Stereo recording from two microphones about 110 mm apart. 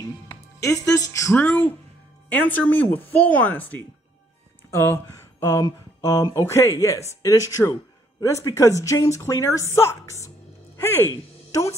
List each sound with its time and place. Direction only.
0.3 s speech: 30° left (ahead or behind)
1.3 s a woman's voice: 15° left (ahead or behind)